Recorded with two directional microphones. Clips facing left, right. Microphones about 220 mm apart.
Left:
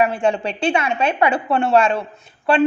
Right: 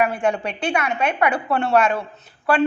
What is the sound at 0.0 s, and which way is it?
A woman's voice, 30° left (ahead or behind).